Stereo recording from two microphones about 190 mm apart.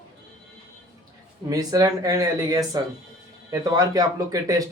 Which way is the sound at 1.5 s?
20° right (ahead or behind).